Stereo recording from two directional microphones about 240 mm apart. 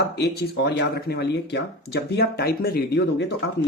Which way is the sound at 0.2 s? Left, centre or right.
Left.